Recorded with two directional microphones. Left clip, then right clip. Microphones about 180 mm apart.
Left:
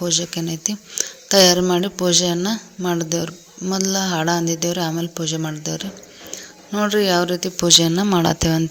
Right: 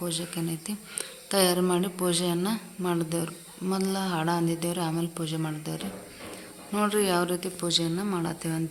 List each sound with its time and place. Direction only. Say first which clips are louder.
0.0 s speech: left 11 dB; 30° left (ahead or behind)